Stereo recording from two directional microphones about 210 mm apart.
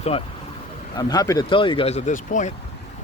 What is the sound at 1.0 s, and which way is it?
Speech, 20° left (ahead or behind).